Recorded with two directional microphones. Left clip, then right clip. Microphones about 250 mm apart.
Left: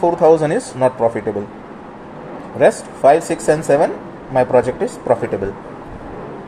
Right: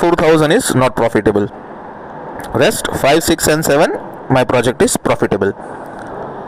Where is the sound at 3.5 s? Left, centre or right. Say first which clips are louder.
Even; right.